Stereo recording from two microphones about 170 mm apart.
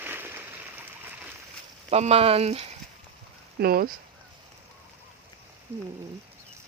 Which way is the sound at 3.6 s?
60° right (ahead or behind).